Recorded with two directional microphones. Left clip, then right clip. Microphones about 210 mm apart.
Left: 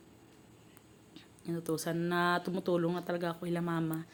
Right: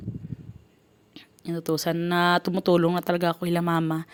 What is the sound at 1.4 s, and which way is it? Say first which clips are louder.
Speech: right 9 dB; 45° right (ahead or behind).